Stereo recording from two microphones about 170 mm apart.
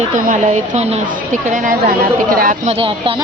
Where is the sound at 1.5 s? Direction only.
55° right (ahead or behind).